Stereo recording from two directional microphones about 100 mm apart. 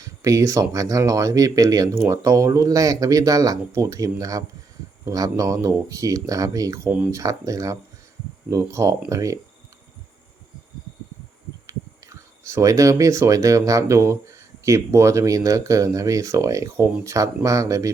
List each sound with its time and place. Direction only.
0.0 s speech: 30° right (ahead or behind)
11.6 s speech: 30° right (ahead or behind)